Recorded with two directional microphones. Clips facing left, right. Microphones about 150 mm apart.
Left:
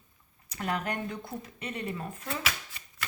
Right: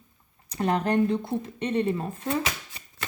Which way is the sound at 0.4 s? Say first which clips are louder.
Right 7 dB; 30° right (ahead or behind).